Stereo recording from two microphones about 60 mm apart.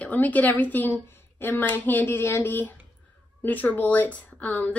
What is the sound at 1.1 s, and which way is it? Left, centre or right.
Speech, left.